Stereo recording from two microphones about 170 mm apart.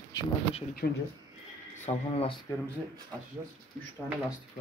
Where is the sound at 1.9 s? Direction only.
40° left (ahead or behind).